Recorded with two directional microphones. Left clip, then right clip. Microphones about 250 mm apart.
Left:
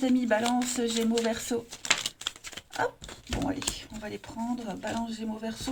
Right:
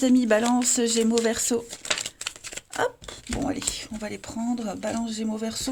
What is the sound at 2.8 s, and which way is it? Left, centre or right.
Speech, right.